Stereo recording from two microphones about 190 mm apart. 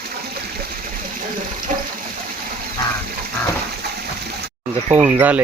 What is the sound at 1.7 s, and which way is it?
Water, 45° right (ahead or behind).